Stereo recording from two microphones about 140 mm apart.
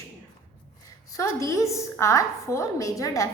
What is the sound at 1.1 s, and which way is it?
A woman's voice, 20° left (ahead or behind).